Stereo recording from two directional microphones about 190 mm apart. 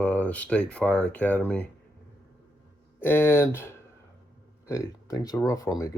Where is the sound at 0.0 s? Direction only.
5° left (ahead or behind).